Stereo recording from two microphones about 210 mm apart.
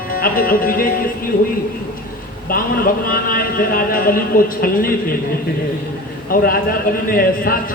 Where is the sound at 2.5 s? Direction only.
45° left (ahead or behind).